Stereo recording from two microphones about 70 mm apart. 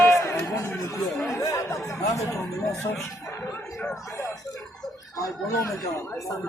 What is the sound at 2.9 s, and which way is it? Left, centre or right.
Speech, left.